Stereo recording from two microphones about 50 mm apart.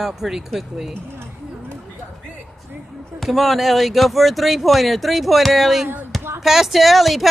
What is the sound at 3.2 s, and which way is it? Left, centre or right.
Speech, centre.